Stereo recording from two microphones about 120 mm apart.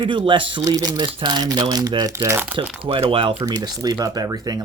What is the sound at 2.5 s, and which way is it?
Speech, 50° right (ahead or behind).